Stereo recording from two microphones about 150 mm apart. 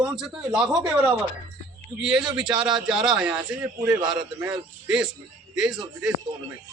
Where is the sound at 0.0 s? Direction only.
5° right (ahead or behind).